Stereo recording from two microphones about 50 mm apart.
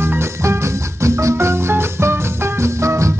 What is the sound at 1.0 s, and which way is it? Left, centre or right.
Music, right.